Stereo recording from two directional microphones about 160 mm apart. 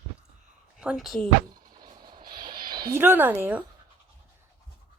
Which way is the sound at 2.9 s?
15° right (ahead or behind).